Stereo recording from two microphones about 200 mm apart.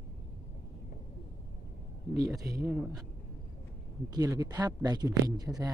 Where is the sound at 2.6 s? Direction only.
Centre (ahead or behind).